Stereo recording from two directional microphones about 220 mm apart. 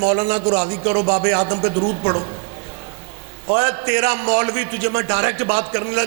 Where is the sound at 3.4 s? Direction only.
20° right (ahead or behind).